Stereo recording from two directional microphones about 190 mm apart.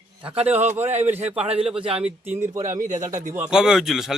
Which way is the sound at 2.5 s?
40° right (ahead or behind).